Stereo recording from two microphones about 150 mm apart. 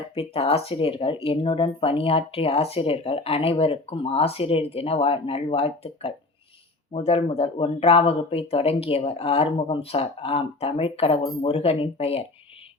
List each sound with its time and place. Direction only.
0.1 s speech: 40° left (ahead or behind)